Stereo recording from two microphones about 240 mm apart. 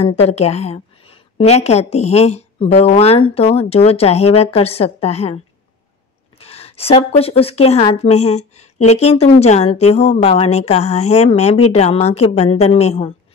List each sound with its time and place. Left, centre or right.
0.0 s a woman's voice: left
6.4 s a woman's voice: left